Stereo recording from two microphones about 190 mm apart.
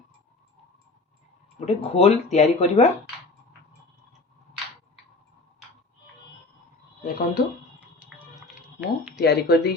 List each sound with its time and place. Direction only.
1.5 s speech: 35° left (ahead or behind)
7.0 s speech: 50° left (ahead or behind)
9.2 s speech: 60° left (ahead or behind)